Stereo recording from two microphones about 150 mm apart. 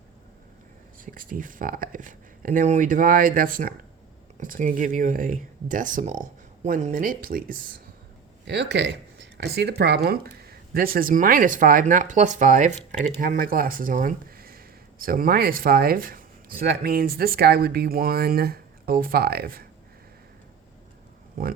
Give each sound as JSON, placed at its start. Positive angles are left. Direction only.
{"t": 0.9, "sound": "speech", "side_deg": -65}
{"t": 9.4, "sound": "speech", "side_deg": -90}
{"t": 21.4, "sound": "speech", "side_deg": -75}